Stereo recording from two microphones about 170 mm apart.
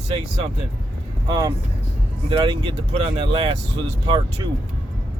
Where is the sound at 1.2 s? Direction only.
25° right (ahead or behind).